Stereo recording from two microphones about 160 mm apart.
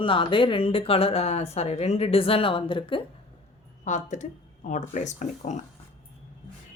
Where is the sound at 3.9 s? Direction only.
50° left (ahead or behind).